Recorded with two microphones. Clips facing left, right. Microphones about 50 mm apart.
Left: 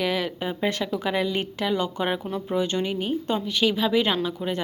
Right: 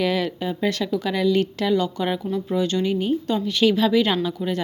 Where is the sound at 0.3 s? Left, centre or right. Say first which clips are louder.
Right 2 dB; left.